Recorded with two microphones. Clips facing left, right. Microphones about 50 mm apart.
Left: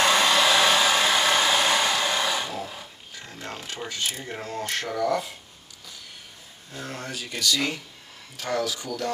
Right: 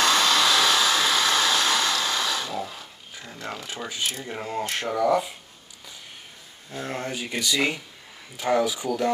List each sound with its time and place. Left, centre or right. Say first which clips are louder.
0.0 s hair dryer: left 1 dB; centre
2.5 s a sound: right 2 dB; centre
4.3 s speech: right 2 dB; centre
6.7 s speech: right 4 dB; right